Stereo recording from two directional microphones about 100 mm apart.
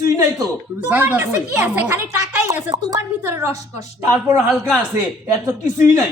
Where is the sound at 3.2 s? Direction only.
25° right (ahead or behind).